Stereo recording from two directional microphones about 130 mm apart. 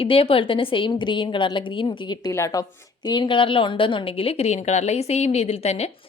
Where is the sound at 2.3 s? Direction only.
25° left (ahead or behind).